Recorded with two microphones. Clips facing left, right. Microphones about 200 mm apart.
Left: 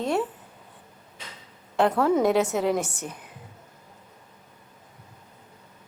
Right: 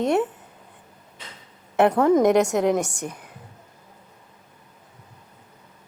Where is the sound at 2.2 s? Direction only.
15° right (ahead or behind).